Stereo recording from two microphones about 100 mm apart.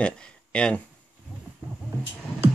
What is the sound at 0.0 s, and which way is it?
Speech, 10° left (ahead or behind).